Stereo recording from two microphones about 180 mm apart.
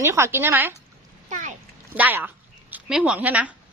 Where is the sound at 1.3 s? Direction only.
45° right (ahead or behind).